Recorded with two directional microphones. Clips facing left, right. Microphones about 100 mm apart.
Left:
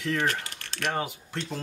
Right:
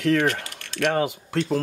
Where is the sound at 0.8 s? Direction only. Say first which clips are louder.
Right 8 dB; 70° right (ahead or behind).